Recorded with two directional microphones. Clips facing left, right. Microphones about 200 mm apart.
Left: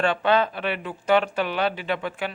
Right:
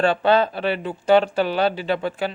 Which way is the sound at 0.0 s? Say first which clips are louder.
Right 3 dB; 35° right (ahead or behind).